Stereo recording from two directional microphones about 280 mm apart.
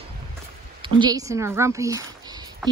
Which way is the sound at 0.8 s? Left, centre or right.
Centre.